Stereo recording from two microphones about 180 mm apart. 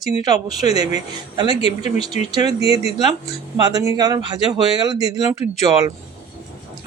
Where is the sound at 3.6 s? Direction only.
20° right (ahead or behind).